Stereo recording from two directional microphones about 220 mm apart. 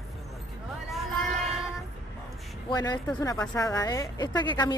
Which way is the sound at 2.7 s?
20° left (ahead or behind).